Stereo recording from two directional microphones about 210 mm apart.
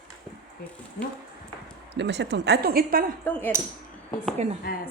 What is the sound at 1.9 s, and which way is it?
A woman's voice, 55° right (ahead or behind).